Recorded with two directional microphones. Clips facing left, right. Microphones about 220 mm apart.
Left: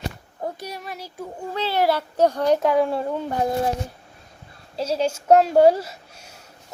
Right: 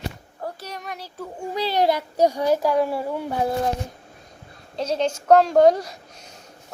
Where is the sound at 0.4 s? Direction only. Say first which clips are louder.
Left 2 dB; 10° left (ahead or behind).